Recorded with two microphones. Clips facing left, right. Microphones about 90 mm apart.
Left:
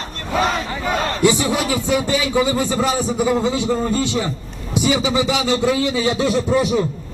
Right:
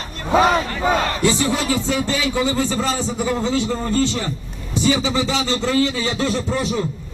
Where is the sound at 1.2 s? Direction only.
15° left (ahead or behind).